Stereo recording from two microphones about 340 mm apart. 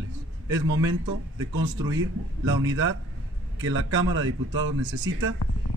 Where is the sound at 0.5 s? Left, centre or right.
Right.